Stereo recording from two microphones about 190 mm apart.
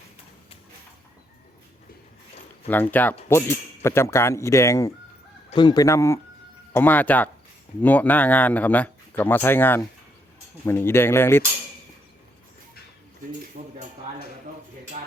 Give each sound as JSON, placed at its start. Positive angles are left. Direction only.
{"t": 2.6, "sound": "speech", "side_deg": 10}
{"t": 13.6, "sound": "speech", "side_deg": -40}